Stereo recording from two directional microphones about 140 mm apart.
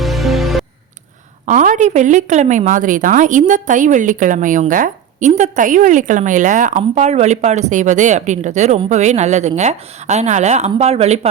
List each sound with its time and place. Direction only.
0.0 s music: centre (ahead or behind)
1.5 s a woman's voice: 65° right (ahead or behind); by 11.3 s 45° right (ahead or behind)